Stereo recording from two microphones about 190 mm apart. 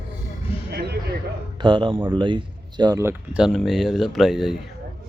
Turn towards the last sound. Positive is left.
turn(degrees=0)  # may be behind; listen again after turning